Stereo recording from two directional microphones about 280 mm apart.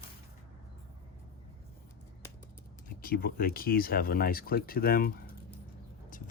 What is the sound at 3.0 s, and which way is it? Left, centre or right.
Speech, left.